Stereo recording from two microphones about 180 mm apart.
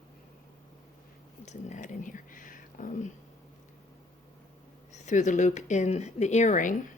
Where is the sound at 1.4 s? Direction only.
40° left (ahead or behind).